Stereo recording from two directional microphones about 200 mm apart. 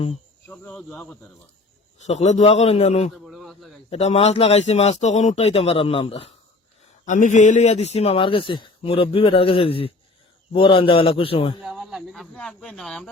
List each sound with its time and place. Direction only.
0.4 s speech: 5° left (ahead or behind)
2.0 s a man's voice: 35° left (ahead or behind)
3.2 s a sound: centre (ahead or behind)
3.8 s a man's voice: 30° left (ahead or behind)
11.6 s speech: 5° right (ahead or behind)